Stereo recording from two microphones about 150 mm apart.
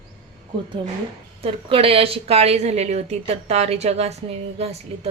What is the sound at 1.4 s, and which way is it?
Speech, 40° right (ahead or behind).